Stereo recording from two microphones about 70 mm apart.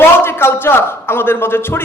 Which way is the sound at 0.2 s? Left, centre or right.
Left.